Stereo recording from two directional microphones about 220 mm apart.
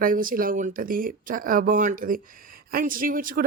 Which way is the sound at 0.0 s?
40° right (ahead or behind).